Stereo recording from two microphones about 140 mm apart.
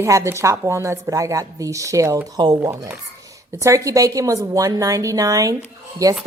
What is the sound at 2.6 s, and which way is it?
A woman's voice, 15° right (ahead or behind).